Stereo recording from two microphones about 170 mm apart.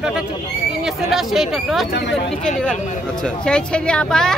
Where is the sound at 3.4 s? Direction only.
5° left (ahead or behind).